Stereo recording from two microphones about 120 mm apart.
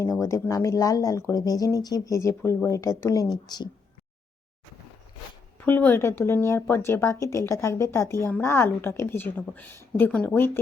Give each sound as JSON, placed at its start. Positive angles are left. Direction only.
{"t": 0.0, "sound": "speech", "side_deg": 25}
{"t": 5.5, "sound": "speech", "side_deg": 15}